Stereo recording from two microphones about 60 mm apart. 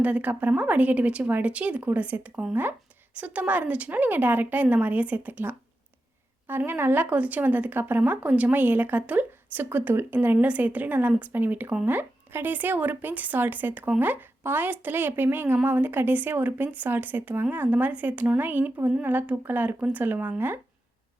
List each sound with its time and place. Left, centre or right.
0.0 s a woman's voice: right
10.3 s a woman's voice: right